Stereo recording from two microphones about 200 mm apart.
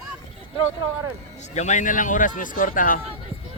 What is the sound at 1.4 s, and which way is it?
Speech, 35° left (ahead or behind).